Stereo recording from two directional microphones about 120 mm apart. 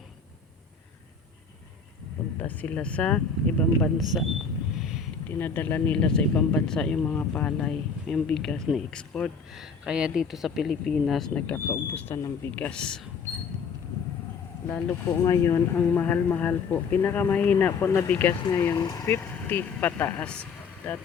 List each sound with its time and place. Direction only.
2.4 s speech: 10° left (ahead or behind)
4.8 s a sound: 5° right (ahead or behind)
5.3 s speech: 15° left (ahead or behind)
9.8 s speech: 5° right (ahead or behind); by 12.3 s 25° left (ahead or behind)
12.5 s speech: 10° left (ahead or behind)
15.2 s speech: 30° left (ahead or behind)
18.5 s speech: 30° left (ahead or behind)
19.0 s speech: 20° left (ahead or behind)